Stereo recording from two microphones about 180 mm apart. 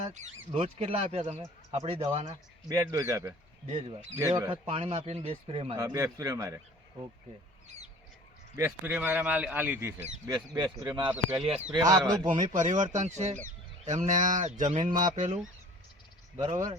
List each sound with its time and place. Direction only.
0.0 s speech: 40° right (ahead or behind)
2.6 s a man's voice: 15° right (ahead or behind)
3.7 s speech: 35° right (ahead or behind)
4.2 s a man's voice: 15° right (ahead or behind)
4.5 s speech: 35° right (ahead or behind)
5.7 s a man's voice: 15° right (ahead or behind)
8.5 s a man's voice: 15° right (ahead or behind)
11.1 s a man's voice: 10° right (ahead or behind)
11.4 s speech: 35° right (ahead or behind)
11.7 s speech: 20° right (ahead or behind)
12.2 s speech: 45° right (ahead or behind)
16.4 s speech: 20° right (ahead or behind)